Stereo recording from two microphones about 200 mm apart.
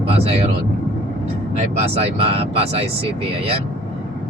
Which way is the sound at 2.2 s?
30° right (ahead or behind).